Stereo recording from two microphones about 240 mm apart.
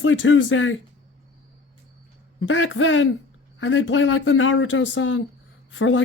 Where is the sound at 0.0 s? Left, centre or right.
Left.